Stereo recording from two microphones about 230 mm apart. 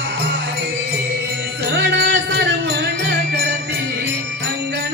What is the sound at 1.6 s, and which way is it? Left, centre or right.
Music, right.